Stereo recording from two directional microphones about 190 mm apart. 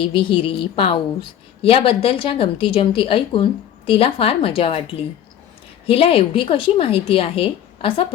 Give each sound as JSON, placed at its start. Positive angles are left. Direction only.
{"t": 0.0, "sound": "a woman's voice", "side_deg": 25}
{"t": 5.8, "sound": "a woman's voice", "side_deg": 30}